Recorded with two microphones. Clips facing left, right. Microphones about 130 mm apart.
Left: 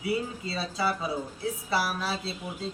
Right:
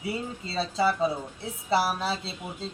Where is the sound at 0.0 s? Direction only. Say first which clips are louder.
Left 3 dB; 25° right (ahead or behind).